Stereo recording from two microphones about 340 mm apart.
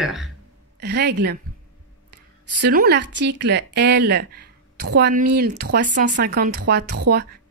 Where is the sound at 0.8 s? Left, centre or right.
Right.